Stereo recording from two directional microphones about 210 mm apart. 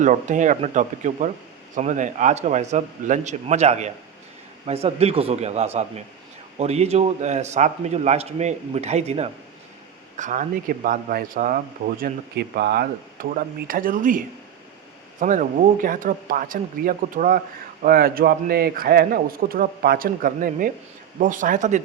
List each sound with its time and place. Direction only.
0.0 s a man's voice: 35° right (ahead or behind)
15.2 s a man's voice: 40° right (ahead or behind)